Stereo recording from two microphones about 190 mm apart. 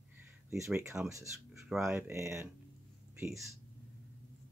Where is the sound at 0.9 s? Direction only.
5° right (ahead or behind).